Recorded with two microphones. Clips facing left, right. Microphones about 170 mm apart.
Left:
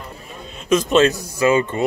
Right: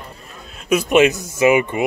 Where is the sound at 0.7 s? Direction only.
15° right (ahead or behind).